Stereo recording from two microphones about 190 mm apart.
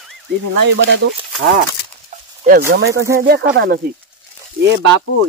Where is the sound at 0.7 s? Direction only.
70° right (ahead or behind).